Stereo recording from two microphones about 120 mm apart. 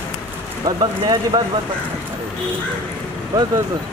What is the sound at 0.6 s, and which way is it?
Speech, 35° right (ahead or behind).